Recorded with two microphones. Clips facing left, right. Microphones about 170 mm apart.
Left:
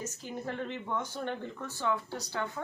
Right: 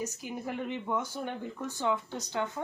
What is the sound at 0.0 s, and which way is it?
Speech, 10° right (ahead or behind).